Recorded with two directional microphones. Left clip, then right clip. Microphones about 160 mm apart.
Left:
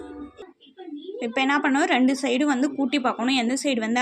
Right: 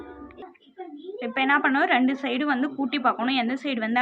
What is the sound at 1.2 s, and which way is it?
A woman's voice, 30° left (ahead or behind).